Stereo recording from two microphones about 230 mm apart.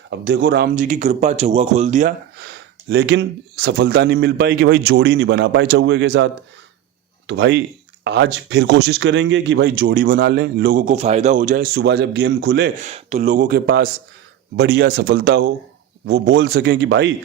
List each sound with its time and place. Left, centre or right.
0.1 s speech: right
2.4 s speech: right
7.3 s speech: right
10.2 s speech: right
12.8 s speech: right